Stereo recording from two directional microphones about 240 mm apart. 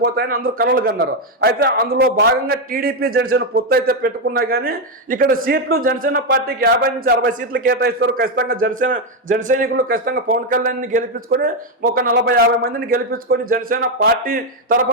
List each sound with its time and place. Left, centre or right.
0.0 s a man's voice: right